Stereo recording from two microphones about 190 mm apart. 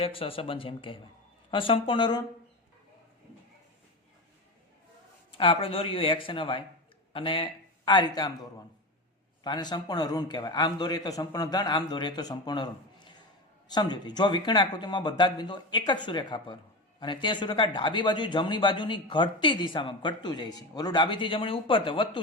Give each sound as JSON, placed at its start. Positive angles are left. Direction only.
{"t": 0.0, "sound": "speech", "side_deg": 30}
{"t": 5.3, "sound": "a man's voice", "side_deg": 30}
{"t": 13.7, "sound": "speech", "side_deg": 20}